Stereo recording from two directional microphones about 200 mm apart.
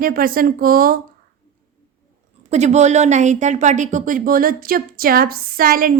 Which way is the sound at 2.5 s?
35° right (ahead or behind).